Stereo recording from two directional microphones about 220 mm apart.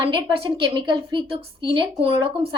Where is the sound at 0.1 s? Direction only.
20° right (ahead or behind).